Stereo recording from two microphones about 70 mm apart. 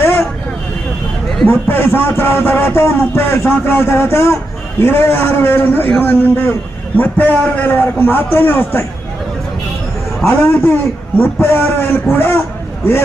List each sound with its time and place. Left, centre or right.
0.0 s vehicle: left
1.5 s speech: left
6.9 s a man's voice: left
10.2 s speech: left